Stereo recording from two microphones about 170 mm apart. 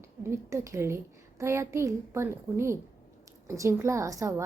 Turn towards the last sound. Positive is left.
turn(degrees=-20)  # may be behind; listen again after turning